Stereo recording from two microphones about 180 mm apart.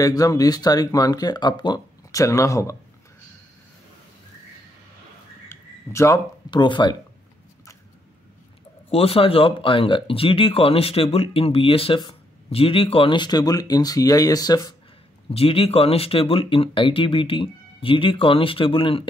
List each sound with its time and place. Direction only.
0.0 s speech: 20° left (ahead or behind)
5.5 s speech: 15° left (ahead or behind)
8.9 s speech: 30° left (ahead or behind)
15.3 s speech: 30° left (ahead or behind)